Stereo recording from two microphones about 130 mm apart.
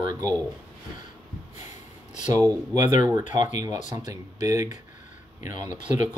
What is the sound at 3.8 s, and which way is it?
Speech, 70° left (ahead or behind).